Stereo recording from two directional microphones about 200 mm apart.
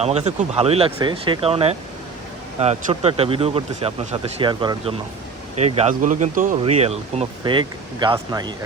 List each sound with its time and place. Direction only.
0.0 s speech: 30° right (ahead or behind)